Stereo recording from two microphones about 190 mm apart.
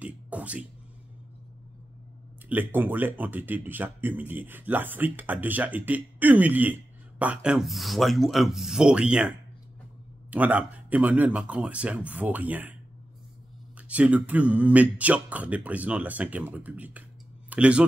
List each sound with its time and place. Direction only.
0.0 s speech: 5° right (ahead or behind)
2.5 s speech: 10° right (ahead or behind)
10.3 s speech: 10° right (ahead or behind)
13.7 s speech: 5° right (ahead or behind)